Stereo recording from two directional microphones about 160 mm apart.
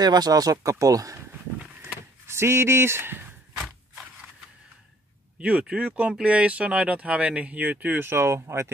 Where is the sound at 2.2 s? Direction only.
15° right (ahead or behind).